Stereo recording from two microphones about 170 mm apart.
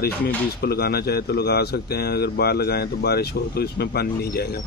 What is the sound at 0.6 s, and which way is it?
Speech, 65° left (ahead or behind).